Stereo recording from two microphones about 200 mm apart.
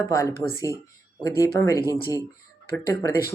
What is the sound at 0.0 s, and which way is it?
Speech, 15° left (ahead or behind).